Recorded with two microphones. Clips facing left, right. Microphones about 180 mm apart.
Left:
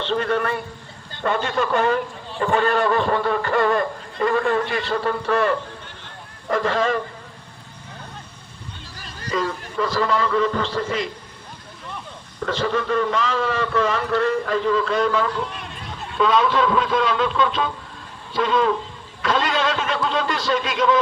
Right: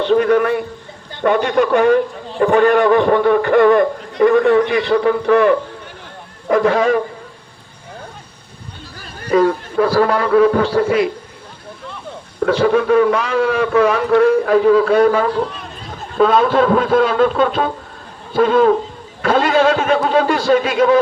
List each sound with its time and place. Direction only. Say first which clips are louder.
0.1 s a man's voice: right 9 dB; 55° right (ahead or behind)
9.2 s a man's voice: right 11 dB; 55° right (ahead or behind)
12.4 s a man's voice: right 9 dB; 60° right (ahead or behind)
16.0 s a man's voice: right 5 dB; 45° right (ahead or behind)